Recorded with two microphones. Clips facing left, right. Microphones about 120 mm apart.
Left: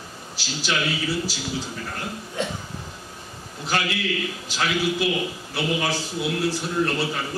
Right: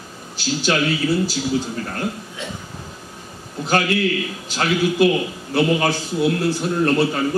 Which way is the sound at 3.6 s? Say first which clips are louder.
Right 7 dB; 45° right (ahead or behind).